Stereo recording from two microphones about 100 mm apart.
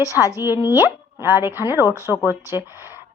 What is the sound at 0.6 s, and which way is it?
Speech, 25° right (ahead or behind).